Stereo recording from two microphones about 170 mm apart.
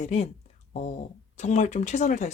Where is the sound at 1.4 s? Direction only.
45° left (ahead or behind).